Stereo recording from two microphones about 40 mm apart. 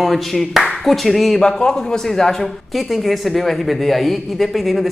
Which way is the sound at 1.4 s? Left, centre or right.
Centre.